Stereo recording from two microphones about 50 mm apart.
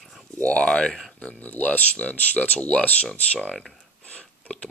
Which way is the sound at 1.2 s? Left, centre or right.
Left.